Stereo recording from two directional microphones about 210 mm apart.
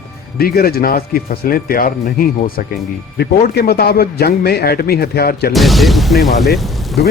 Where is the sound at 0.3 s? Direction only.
45° left (ahead or behind).